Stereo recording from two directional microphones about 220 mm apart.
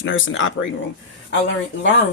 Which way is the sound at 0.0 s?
60° left (ahead or behind).